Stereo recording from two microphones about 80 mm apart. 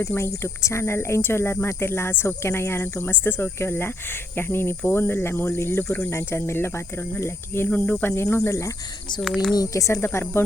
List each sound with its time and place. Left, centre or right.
0.2 s speech: left
7.7 s speech: left
9.2 s speech: centre
9.6 s speech: left